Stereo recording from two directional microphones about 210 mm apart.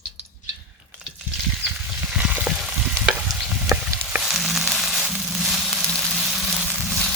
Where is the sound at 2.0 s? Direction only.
5° right (ahead or behind).